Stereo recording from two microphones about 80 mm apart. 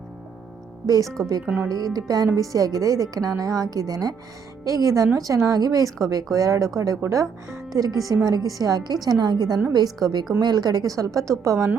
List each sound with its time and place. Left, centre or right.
1.0 s speech: centre
1.6 s a woman's voice: right